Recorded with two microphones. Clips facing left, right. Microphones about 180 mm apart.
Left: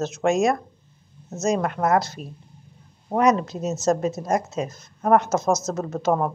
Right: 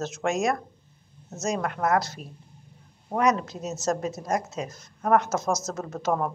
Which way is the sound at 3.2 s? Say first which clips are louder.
Left 4 dB; 25° left (ahead or behind).